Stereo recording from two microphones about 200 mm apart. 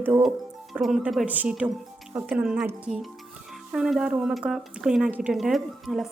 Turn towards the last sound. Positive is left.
turn(degrees=0)  # may be behind; listen again after turning